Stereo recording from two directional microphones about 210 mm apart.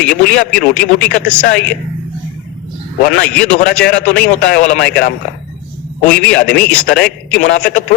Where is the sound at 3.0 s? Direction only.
50° left (ahead or behind).